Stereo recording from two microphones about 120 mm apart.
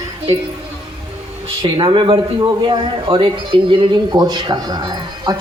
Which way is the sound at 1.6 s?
40° right (ahead or behind).